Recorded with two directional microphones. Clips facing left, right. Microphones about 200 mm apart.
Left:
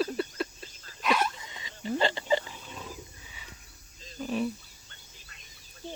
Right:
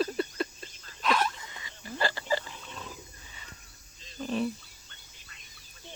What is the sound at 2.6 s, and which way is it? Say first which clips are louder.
Wild animals: left 1 dB; 10° left (ahead or behind).